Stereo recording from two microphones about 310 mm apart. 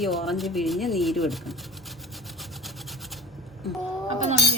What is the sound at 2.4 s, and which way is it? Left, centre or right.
Wood, centre.